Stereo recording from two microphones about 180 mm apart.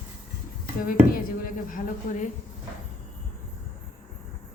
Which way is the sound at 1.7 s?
45° left (ahead or behind).